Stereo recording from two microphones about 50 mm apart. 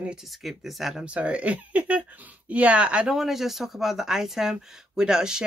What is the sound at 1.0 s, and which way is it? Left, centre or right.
Speech, right.